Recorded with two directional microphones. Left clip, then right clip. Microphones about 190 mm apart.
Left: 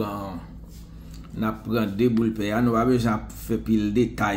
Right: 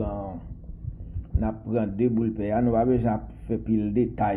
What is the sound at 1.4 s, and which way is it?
Speech, 35° left (ahead or behind).